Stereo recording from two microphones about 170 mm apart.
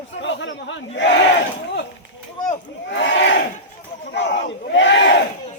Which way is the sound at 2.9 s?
90° left.